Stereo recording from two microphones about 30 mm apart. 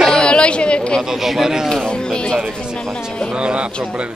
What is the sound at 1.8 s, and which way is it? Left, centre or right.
Music, left.